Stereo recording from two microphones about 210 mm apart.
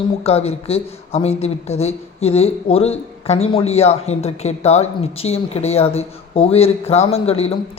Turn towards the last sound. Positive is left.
turn(degrees=30)  # may be behind; listen again after turning